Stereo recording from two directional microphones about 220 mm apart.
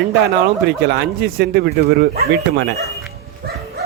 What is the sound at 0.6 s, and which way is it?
Speech, 50° right (ahead or behind).